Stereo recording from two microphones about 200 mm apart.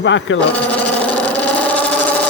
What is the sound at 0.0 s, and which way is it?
Speech, 65° left (ahead or behind).